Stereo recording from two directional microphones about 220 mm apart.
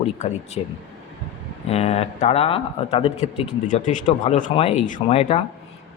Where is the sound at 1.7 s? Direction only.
30° left (ahead or behind).